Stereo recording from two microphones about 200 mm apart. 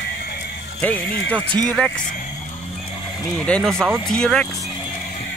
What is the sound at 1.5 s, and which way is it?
Speech, 20° right (ahead or behind).